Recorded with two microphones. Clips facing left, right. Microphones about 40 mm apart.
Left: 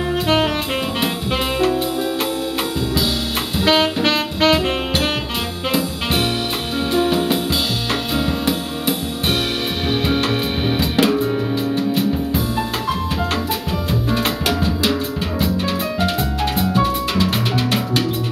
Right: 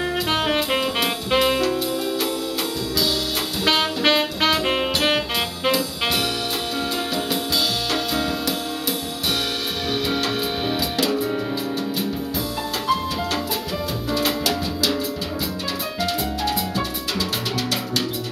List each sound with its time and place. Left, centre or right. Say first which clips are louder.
3.6 s music: left 5 dB; centre
4.0 s music: left 2 dB; centre
6.9 s music: left 11 dB; left
10.0 s music: left 4 dB; left
14.1 s music: even; left
16.7 s music: left 7 dB; left